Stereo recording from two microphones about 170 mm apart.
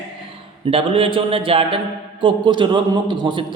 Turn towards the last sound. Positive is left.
turn(degrees=-25)  # may be behind; listen again after turning